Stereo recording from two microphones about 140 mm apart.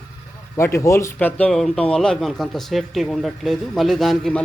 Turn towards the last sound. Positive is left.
turn(degrees=0)  # may be behind; listen again after turning